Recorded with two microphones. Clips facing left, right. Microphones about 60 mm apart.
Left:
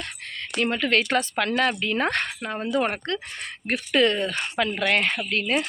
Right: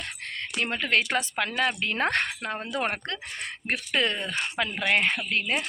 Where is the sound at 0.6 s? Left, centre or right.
Right.